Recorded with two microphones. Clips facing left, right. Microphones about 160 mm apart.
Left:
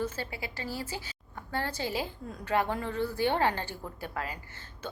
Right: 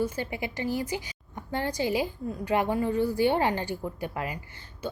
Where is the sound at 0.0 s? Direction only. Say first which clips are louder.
Right 5 dB; 20° right (ahead or behind).